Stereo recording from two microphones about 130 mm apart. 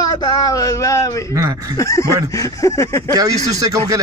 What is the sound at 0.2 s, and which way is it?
A man's voice, 30° left (ahead or behind).